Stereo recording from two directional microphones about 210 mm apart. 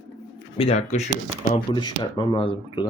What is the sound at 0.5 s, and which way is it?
Speech, 30° left (ahead or behind).